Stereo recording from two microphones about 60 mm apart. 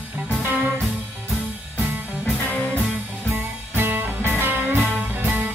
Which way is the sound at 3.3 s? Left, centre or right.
Right.